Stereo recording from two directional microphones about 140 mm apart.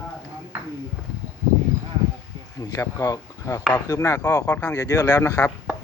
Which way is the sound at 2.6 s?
25° left (ahead or behind).